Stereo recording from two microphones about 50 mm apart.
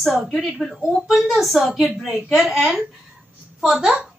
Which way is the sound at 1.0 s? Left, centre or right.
Centre.